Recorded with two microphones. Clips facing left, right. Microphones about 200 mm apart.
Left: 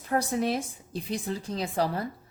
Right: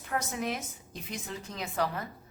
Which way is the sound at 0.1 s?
35° left (ahead or behind).